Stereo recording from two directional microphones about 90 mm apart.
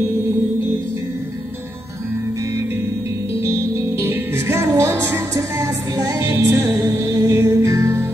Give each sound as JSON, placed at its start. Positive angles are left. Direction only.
{"t": 3.4, "sound": "music", "side_deg": -30}